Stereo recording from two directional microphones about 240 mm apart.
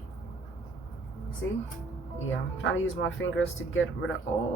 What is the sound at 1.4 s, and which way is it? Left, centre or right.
Speech, left.